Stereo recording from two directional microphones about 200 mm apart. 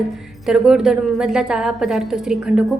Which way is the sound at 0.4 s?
5° right (ahead or behind).